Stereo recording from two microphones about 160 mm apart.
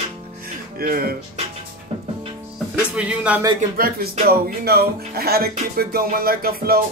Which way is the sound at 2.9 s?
5° right (ahead or behind).